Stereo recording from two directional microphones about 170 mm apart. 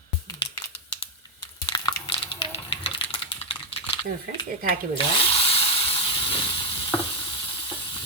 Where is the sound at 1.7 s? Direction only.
25° left (ahead or behind).